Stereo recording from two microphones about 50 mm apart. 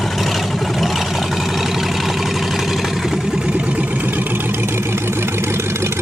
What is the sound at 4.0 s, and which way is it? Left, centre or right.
Vehicle, right.